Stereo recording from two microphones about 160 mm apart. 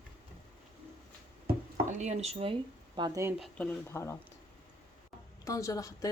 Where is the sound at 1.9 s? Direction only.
45° right (ahead or behind).